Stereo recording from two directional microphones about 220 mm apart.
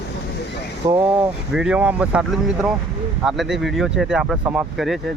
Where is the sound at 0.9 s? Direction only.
10° right (ahead or behind).